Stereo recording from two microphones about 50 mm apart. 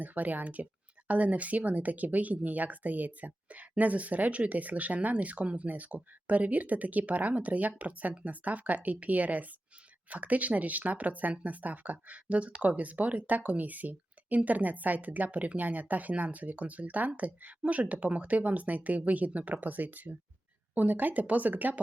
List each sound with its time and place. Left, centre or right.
0.0 s speech: right